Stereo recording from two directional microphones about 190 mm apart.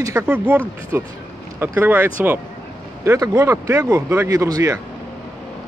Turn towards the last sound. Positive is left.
turn(degrees=-20)  # may be behind; listen again after turning